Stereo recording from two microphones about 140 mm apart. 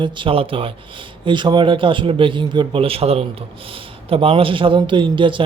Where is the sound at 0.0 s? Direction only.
35° right (ahead or behind).